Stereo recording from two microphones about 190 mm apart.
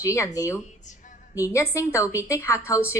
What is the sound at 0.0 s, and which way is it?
A woman's voice, 15° left (ahead or behind).